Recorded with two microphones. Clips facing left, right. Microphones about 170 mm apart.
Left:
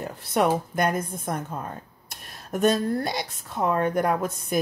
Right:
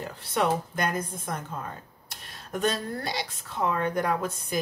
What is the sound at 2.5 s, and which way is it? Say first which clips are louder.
Speech: left 6 dB; 50° left (ahead or behind).